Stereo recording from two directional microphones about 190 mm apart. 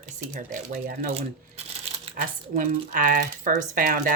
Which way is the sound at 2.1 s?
45° right (ahead or behind).